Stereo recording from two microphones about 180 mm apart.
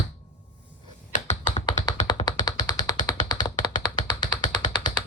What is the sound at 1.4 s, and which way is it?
Tap, 25° left (ahead or behind).